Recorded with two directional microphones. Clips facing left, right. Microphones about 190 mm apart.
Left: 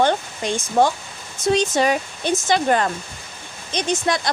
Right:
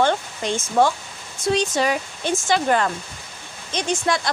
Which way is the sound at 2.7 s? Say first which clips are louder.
Left 1 dB; 30° left (ahead or behind).